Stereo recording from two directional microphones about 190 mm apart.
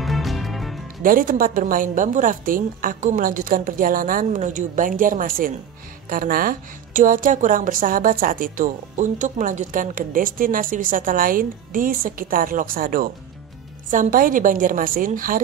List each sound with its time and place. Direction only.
0.0 s music: centre (ahead or behind)
1.0 s a woman's voice: 45° right (ahead or behind)